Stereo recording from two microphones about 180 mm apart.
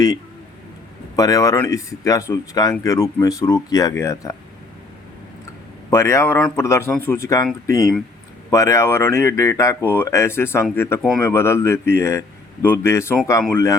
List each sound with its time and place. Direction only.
1.1 s speech: 20° left (ahead or behind)
5.9 s speech: 15° left (ahead or behind)
8.4 s speech: 15° left (ahead or behind)